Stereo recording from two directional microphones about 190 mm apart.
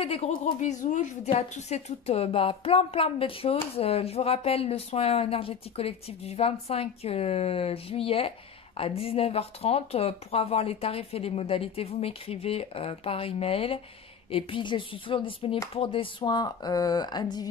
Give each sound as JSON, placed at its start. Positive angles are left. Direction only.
{"t": 0.0, "sound": "speech", "side_deg": 30}